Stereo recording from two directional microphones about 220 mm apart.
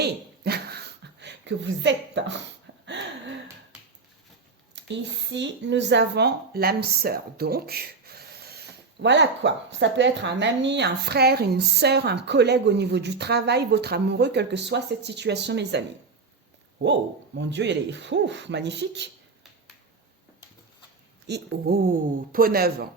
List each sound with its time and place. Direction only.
0.0 s a sound: 45° right (ahead or behind)
4.7 s speech: 55° right (ahead or behind)
21.2 s speech: 45° right (ahead or behind)